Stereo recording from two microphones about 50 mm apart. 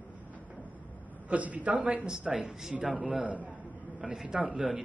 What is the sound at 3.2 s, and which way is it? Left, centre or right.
Speech, right.